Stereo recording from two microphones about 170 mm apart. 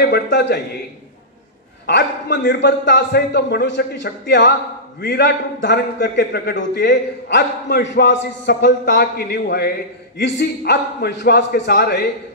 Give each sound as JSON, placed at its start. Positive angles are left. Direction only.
{"t": 0.0, "sound": "a man's voice", "side_deg": 75}
{"t": 1.9, "sound": "a man's voice", "side_deg": 85}